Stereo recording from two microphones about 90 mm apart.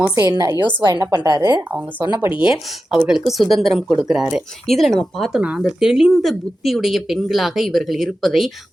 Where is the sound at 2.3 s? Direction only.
10° right (ahead or behind).